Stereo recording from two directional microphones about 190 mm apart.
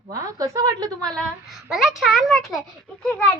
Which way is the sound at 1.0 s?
5° left (ahead or behind).